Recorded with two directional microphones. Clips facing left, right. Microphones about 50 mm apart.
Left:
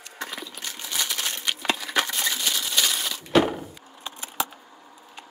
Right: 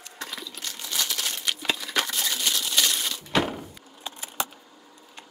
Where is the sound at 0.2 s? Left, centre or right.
Centre.